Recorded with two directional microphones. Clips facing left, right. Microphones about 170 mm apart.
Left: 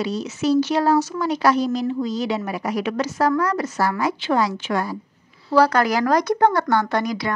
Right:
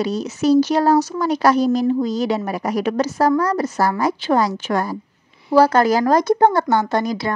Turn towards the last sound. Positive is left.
turn(degrees=-25)  # may be behind; listen again after turning